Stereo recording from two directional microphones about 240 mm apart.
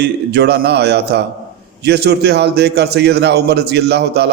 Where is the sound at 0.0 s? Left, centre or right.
Right.